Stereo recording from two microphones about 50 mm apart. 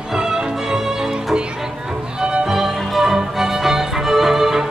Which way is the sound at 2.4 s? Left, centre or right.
Centre.